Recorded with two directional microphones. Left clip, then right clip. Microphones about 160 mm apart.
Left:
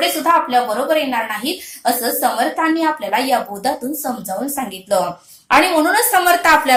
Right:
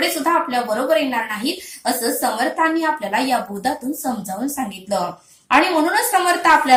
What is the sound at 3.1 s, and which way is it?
A woman's voice, 25° left (ahead or behind).